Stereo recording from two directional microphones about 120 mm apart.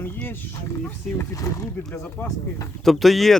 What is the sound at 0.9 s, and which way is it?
Speech, 25° left (ahead or behind).